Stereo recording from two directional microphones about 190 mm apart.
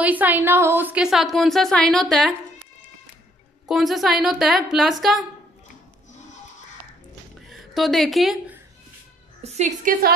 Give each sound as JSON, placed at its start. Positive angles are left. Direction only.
{"t": 0.0, "sound": "a woman's voice", "side_deg": -10}
{"t": 3.6, "sound": "a woman's voice", "side_deg": 0}
{"t": 7.4, "sound": "a woman's voice", "side_deg": 0}
{"t": 9.4, "sound": "a woman's voice", "side_deg": -35}